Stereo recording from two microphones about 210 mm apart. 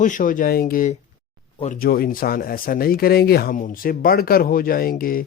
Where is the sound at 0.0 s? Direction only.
40° left (ahead or behind).